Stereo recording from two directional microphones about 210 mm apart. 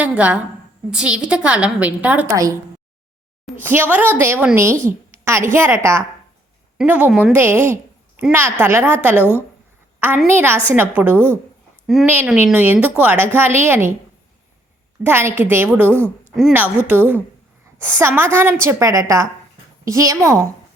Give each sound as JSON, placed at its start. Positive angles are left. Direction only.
{"t": 0.0, "sound": "a woman's voice", "side_deg": -5}
{"t": 3.6, "sound": "a woman's voice", "side_deg": -10}
{"t": 4.9, "sound": "a sound", "side_deg": -10}
{"t": 5.5, "sound": "a woman's voice", "side_deg": -10}
{"t": 15.0, "sound": "a woman's voice", "side_deg": -10}